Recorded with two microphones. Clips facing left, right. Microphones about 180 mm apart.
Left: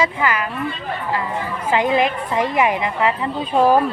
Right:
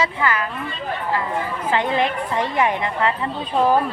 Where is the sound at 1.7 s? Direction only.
10° left (ahead or behind).